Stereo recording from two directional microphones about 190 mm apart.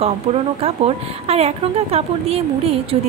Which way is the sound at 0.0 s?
30° right (ahead or behind).